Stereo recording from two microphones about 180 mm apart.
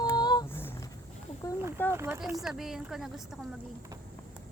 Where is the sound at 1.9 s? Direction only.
15° right (ahead or behind).